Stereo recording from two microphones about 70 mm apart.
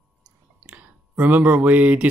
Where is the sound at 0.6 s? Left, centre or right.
Centre.